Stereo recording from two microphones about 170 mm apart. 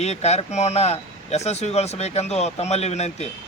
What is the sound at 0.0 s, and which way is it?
Speech, 40° left (ahead or behind).